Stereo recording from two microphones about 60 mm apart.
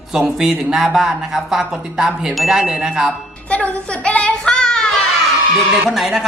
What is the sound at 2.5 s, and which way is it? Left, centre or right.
Speech, centre.